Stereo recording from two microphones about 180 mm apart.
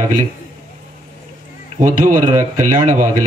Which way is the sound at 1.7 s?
45° right (ahead or behind).